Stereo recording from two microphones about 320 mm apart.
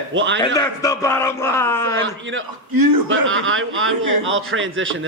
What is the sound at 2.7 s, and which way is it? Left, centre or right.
Speech, right.